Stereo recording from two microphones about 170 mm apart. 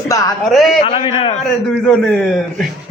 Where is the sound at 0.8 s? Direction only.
35° left (ahead or behind).